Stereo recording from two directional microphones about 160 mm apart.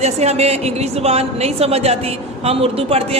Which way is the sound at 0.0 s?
40° right (ahead or behind).